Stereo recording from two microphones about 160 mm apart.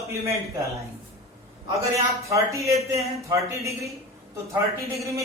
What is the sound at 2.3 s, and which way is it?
Speech, 20° right (ahead or behind).